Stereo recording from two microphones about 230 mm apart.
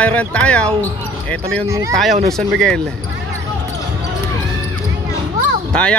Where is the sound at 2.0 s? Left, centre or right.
Centre.